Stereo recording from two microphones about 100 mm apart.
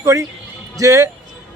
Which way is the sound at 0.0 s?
30° right (ahead or behind).